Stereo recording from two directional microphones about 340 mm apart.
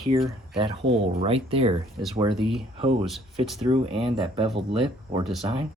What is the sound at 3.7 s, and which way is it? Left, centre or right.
Speech, centre.